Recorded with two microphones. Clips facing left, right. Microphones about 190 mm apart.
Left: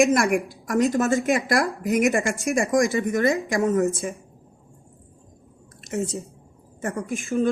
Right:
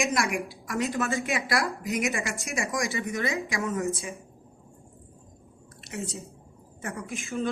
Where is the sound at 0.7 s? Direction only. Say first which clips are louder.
Left 8 dB; 40° left (ahead or behind).